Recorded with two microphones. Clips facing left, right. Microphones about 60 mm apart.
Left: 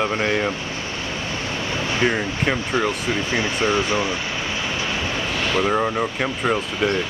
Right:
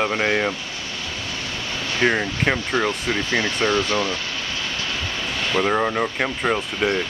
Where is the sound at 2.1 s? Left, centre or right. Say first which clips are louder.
Right 4 dB; centre.